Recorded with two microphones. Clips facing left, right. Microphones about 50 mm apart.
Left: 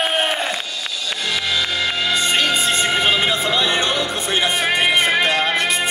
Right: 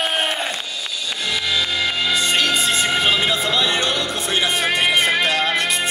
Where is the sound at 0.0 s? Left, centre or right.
Centre.